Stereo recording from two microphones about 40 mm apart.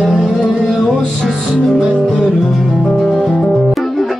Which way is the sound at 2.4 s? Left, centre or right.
Centre.